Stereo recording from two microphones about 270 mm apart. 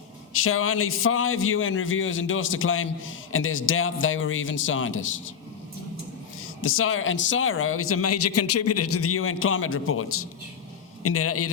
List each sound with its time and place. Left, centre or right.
0.3 s a man's voice: left
6.4 s a man's voice: left